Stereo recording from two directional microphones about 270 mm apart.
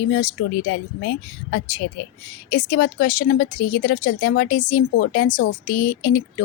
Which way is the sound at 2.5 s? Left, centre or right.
Left.